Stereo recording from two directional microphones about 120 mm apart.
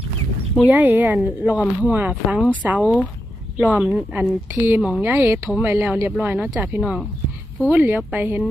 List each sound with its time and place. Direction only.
0.7 s speech: 15° right (ahead or behind)